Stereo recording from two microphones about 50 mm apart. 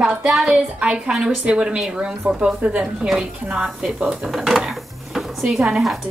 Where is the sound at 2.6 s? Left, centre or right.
Right.